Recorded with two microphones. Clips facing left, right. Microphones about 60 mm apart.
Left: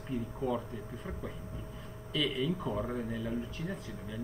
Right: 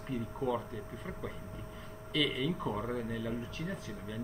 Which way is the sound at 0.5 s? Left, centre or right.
Centre.